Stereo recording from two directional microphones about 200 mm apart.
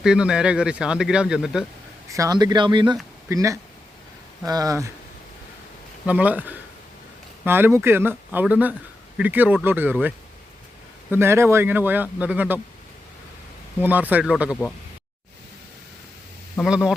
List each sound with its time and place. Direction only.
0.0 s speech: 5° right (ahead or behind)
2.0 s speech: 15° right (ahead or behind)
6.1 s speech: 5° right (ahead or behind)
11.1 s speech: 10° right (ahead or behind)
13.8 s speech: 10° right (ahead or behind)
16.6 s speech: 5° right (ahead or behind)